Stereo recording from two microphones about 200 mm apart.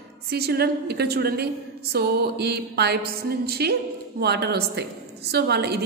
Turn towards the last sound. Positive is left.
turn(degrees=-55)  # may be behind; listen again after turning